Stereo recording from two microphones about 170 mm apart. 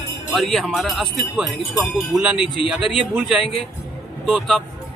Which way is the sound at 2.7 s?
Centre (ahead or behind).